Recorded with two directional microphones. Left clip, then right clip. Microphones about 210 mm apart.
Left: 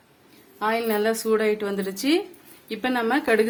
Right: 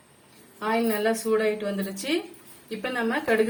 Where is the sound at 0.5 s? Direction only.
50° left (ahead or behind).